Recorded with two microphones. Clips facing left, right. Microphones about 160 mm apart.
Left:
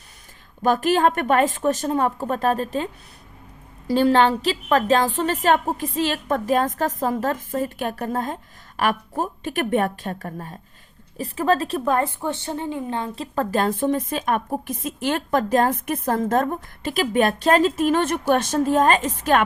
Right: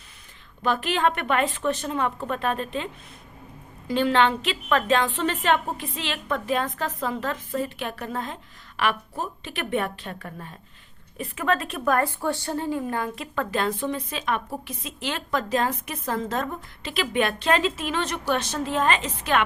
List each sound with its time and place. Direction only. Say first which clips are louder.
0.6 s a woman's voice: left 5 dB; 45° left (ahead or behind)